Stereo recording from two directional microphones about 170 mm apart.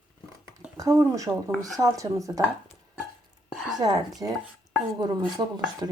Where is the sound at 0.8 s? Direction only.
20° right (ahead or behind).